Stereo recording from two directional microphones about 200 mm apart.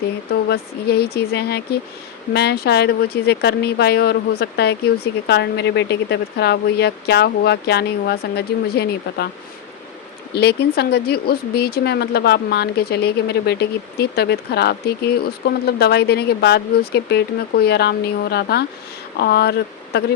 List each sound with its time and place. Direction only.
0.4 s speech: 55° left (ahead or behind)
10.3 s speech: 55° left (ahead or behind)